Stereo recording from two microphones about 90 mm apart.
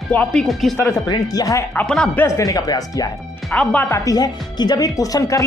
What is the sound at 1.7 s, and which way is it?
Speech, 10° left (ahead or behind).